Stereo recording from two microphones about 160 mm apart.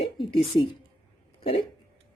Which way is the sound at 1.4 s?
35° left (ahead or behind).